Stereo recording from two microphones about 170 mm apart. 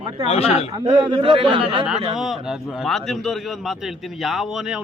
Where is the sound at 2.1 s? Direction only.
Centre (ahead or behind).